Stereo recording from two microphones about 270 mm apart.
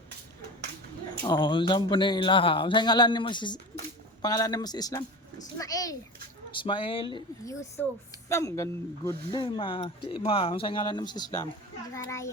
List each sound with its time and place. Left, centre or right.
1.2 s speech: centre